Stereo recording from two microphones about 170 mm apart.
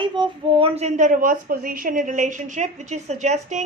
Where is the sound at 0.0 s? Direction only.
30° right (ahead or behind).